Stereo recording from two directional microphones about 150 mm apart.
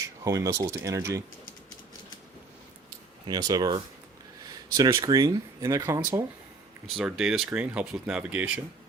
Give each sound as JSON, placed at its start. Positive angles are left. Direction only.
{"t": 0.0, "sound": "speech", "side_deg": -20}
{"t": 3.2, "sound": "speech", "side_deg": -25}
{"t": 4.8, "sound": "speech", "side_deg": -20}
{"t": 6.8, "sound": "speech", "side_deg": 0}